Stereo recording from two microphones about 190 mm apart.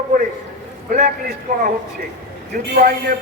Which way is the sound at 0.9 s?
45° right (ahead or behind).